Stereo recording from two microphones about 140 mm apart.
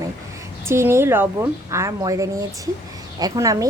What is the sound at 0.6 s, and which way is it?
A woman's voice, 20° right (ahead or behind).